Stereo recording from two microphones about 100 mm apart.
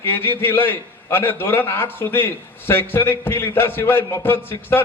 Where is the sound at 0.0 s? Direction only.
20° left (ahead or behind).